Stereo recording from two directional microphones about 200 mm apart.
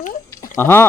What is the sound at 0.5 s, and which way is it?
Speech, 10° left (ahead or behind).